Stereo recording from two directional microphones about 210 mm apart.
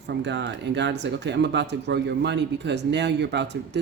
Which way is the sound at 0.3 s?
55° right (ahead or behind).